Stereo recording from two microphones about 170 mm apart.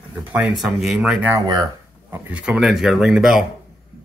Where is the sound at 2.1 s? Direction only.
10° right (ahead or behind).